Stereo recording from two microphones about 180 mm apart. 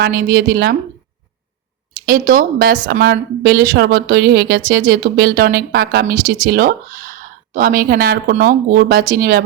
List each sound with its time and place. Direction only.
0.0 s a woman's voice: 60° right (ahead or behind)
2.0 s a woman's voice: 50° right (ahead or behind)